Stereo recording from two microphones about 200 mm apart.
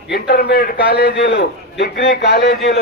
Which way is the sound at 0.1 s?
55° left (ahead or behind).